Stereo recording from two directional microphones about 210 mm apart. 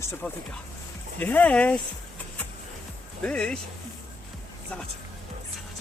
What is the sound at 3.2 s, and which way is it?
Speech, 5° left (ahead or behind).